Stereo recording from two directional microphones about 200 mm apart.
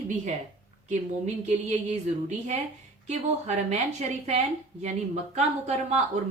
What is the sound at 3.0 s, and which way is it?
Speech, 35° right (ahead or behind).